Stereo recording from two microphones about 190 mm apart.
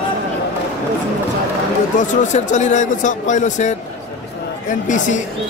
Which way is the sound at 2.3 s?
40° left (ahead or behind).